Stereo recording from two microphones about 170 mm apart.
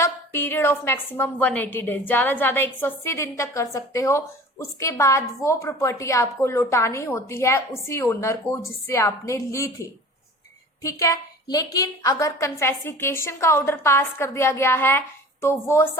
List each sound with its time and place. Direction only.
0.0 s a woman's voice: 15° left (ahead or behind)
10.8 s a woman's voice: 20° left (ahead or behind)